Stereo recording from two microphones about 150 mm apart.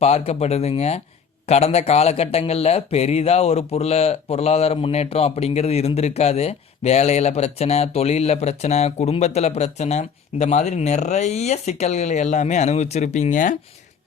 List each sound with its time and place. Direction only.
0.0 s speech: 45° left (ahead or behind)